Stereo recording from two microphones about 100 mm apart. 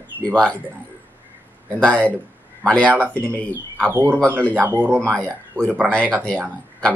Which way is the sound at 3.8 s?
25° right (ahead or behind).